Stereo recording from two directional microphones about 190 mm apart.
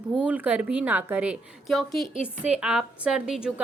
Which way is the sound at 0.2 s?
5° right (ahead or behind).